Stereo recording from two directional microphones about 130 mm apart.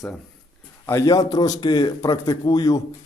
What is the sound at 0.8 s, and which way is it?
A man's voice, 25° left (ahead or behind).